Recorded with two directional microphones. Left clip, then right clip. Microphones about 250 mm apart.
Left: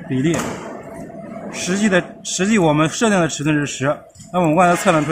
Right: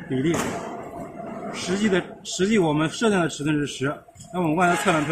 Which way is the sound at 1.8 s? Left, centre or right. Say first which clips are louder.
Left 7 dB; left.